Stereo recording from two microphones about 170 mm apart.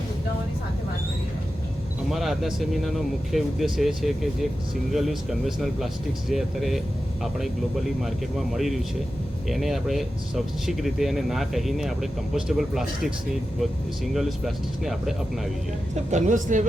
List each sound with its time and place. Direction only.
2.0 s speech: centre (ahead or behind)
8.0 s speech: centre (ahead or behind)
16.1 s speech: 45° right (ahead or behind)